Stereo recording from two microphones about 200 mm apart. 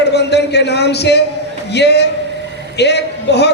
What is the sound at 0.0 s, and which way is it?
A man's voice, 55° left (ahead or behind).